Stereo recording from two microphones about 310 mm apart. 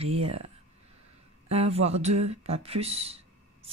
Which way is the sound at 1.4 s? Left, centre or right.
Centre.